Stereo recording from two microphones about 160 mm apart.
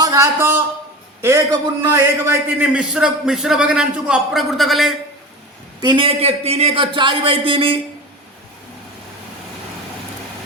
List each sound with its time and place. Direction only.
0.0 s a man's voice: 20° right (ahead or behind); by 4.9 s centre (ahead or behind)
5.8 s a man's voice: 30° right (ahead or behind)